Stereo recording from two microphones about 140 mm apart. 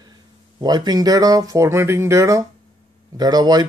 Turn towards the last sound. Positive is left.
turn(degrees=-30)  # may be behind; listen again after turning